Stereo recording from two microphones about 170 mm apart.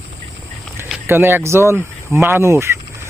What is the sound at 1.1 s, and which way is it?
Speech, 15° right (ahead or behind).